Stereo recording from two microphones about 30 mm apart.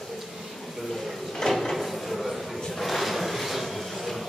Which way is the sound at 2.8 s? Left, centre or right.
Centre.